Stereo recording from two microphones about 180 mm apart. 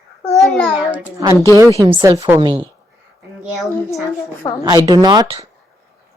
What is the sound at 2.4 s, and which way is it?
Speech, 25° right (ahead or behind).